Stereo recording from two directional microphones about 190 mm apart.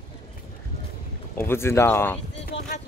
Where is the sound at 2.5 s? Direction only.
40° left (ahead or behind).